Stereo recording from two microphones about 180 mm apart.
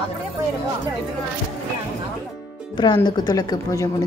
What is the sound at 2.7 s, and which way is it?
A woman's voice, 25° left (ahead or behind).